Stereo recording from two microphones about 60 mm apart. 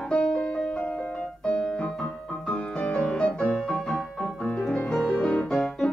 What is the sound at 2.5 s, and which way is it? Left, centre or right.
Music, centre.